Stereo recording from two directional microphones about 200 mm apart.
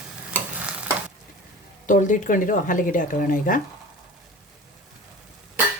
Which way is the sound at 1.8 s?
40° left (ahead or behind).